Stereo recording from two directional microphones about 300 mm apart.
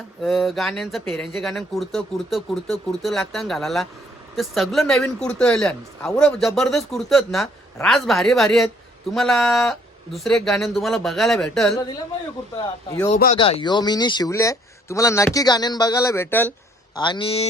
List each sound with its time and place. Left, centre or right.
0.2 s speech: centre
13.1 s speech: left